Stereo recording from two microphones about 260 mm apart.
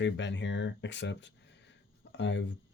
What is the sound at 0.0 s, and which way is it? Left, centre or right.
Speech, left.